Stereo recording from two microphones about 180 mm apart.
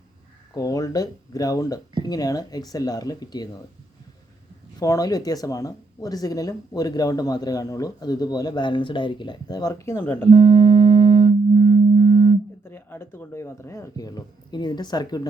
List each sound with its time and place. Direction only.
0.5 s speech: 20° left (ahead or behind)
4.8 s speech: 20° left (ahead or behind)
10.2 s music: 25° right (ahead or behind)
12.7 s a sound: 15° left (ahead or behind)